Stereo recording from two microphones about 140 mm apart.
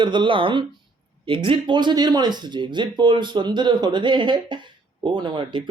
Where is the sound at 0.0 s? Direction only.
35° right (ahead or behind).